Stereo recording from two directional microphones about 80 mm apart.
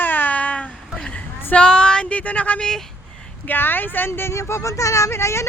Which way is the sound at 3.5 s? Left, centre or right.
Left.